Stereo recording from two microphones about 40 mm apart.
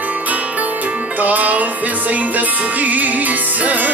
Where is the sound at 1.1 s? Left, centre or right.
Right.